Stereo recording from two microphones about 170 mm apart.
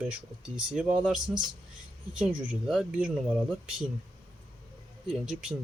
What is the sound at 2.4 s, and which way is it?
Speech, 5° right (ahead or behind).